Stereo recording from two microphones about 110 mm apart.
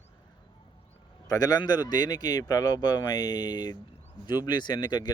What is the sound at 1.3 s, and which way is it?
Speech, 35° left (ahead or behind).